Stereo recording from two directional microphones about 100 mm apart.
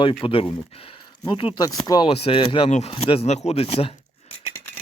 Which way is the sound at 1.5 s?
40° left (ahead or behind).